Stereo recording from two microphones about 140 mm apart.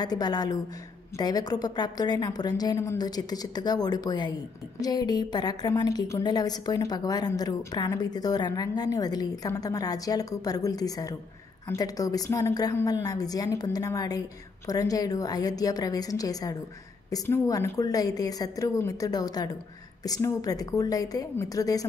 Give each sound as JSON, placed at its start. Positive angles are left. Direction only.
{"t": 0.0, "sound": "a woman's voice", "side_deg": 30}